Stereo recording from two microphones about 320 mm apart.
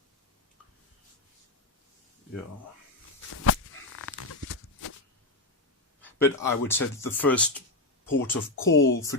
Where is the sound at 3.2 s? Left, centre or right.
Left.